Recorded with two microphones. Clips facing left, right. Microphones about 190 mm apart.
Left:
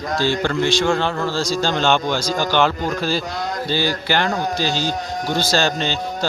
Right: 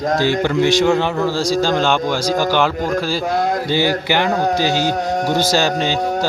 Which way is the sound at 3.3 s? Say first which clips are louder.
Right 8 dB; 55° right (ahead or behind).